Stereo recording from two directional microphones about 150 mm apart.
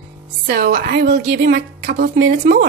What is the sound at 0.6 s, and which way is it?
A woman's voice, 65° right (ahead or behind).